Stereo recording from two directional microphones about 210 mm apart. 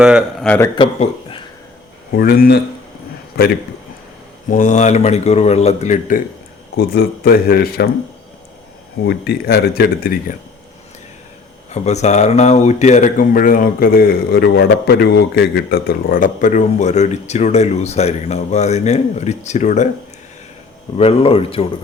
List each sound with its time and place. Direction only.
0.0 s speech: 5° right (ahead or behind)
0.4 s speech: 10° left (ahead or behind)
0.8 s speech: 25° left (ahead or behind)
2.1 s speech: 45° left (ahead or behind)
6.7 s speech: 50° left (ahead or behind)
9.0 s speech: 50° left (ahead or behind)
11.7 s speech: 35° left (ahead or behind)
21.0 s speech: 30° left (ahead or behind)